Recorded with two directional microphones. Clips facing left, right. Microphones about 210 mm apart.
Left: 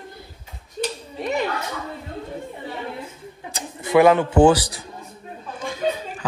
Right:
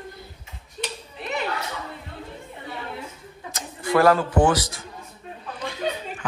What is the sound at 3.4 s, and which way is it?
A man's voice, 25° left (ahead or behind).